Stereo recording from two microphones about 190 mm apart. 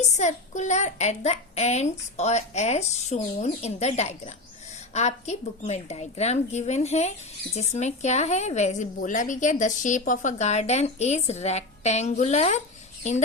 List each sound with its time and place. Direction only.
0.2 s a woman's voice: 40° left (ahead or behind)